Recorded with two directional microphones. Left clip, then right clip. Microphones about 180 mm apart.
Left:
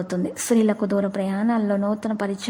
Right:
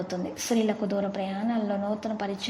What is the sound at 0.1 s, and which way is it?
A woman's voice, 40° left (ahead or behind).